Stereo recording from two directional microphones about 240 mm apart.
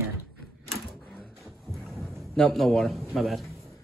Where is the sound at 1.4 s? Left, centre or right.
Centre.